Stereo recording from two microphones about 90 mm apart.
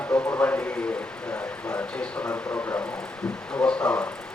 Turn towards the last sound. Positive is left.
turn(degrees=10)  # may be behind; listen again after turning